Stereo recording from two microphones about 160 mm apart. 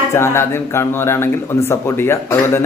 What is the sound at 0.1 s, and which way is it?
Speech, 15° left (ahead or behind).